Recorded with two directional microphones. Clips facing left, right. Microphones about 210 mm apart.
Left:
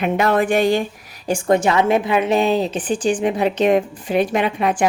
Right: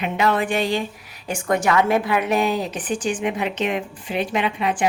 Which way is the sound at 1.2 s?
30° left (ahead or behind).